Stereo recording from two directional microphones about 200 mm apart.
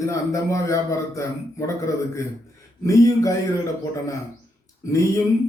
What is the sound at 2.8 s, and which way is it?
Speech, 15° left (ahead or behind).